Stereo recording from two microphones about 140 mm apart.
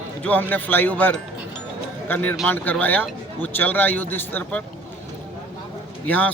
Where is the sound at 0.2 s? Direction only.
10° left (ahead or behind).